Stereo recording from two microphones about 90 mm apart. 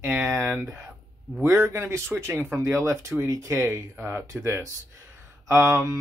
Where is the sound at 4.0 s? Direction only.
25° right (ahead or behind).